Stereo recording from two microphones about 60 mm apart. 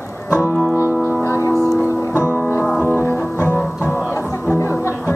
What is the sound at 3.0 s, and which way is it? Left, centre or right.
Music, left.